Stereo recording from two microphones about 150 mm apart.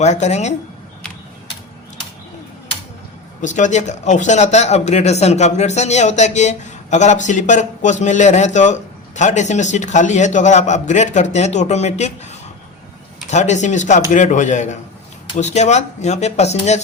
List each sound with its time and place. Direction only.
0.0 s speech: 50° left (ahead or behind)
3.4 s speech: 55° left (ahead or behind)